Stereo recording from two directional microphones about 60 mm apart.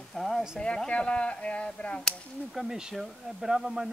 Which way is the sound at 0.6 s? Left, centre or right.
Centre.